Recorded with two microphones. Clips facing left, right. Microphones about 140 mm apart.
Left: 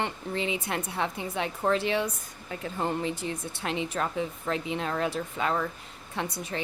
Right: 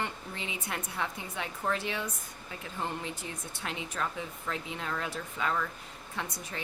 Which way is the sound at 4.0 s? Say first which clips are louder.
Left 2 dB; 40° left (ahead or behind).